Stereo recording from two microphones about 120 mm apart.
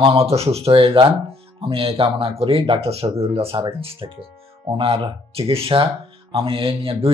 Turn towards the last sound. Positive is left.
turn(degrees=-50)  # may be behind; listen again after turning